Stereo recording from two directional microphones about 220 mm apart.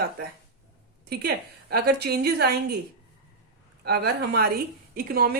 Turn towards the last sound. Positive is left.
turn(degrees=-45)  # may be behind; listen again after turning